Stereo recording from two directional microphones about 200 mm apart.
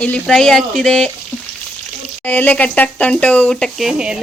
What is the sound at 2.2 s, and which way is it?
Speech, 10° left (ahead or behind).